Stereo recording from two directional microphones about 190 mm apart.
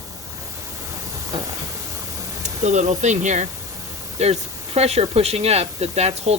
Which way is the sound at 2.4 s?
40° right (ahead or behind).